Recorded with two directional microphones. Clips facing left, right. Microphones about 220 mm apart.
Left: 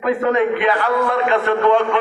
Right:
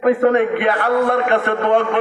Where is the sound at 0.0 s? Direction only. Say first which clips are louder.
Right 3 dB; 55° right (ahead or behind).